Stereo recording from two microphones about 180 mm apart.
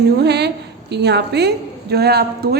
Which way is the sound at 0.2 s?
65° right (ahead or behind).